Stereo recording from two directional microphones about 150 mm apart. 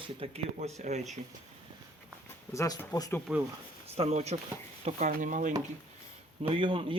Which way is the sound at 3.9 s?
45° right (ahead or behind).